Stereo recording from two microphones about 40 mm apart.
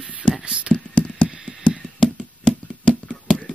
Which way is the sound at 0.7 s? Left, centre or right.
Left.